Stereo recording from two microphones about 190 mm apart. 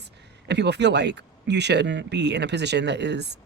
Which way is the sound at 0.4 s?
65° right (ahead or behind).